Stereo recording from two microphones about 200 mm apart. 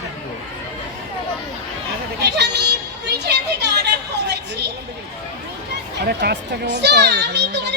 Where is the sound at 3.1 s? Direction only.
55° right (ahead or behind).